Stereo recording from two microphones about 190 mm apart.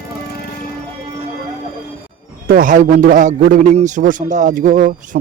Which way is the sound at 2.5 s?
45° right (ahead or behind).